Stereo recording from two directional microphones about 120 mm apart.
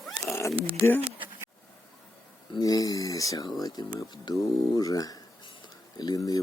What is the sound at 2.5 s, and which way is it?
Speech, 30° left (ahead or behind).